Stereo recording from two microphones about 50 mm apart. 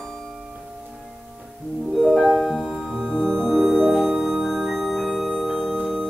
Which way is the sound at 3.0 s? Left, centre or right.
Centre.